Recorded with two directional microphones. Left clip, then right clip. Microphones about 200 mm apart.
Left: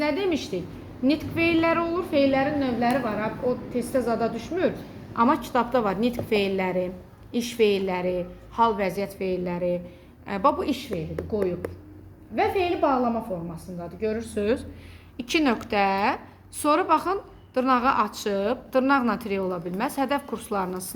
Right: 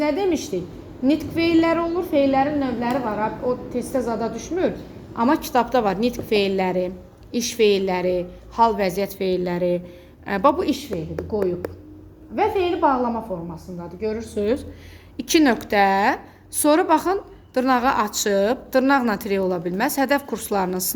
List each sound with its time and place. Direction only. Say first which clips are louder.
0.0 s a woman's voice: right 4 dB; 15° right (ahead or behind)
10.9 s a woman's voice: right 3 dB; centre (ahead or behind)
12.4 s a woman's voice: right 3 dB; 15° right (ahead or behind)
14.3 s a woman's voice: right 3 dB; 20° right (ahead or behind)